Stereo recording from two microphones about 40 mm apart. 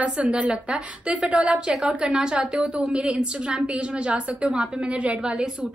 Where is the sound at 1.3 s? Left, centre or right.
Right.